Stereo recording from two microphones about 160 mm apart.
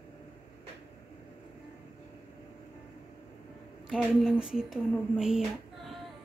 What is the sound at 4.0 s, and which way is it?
Speech, centre (ahead or behind).